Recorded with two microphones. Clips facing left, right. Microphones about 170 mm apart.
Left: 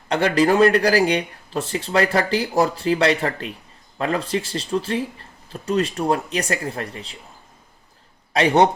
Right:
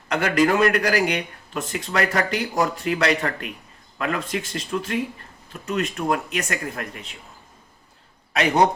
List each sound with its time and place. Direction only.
0.1 s speech: 30° left (ahead or behind)
8.3 s speech: 30° left (ahead or behind)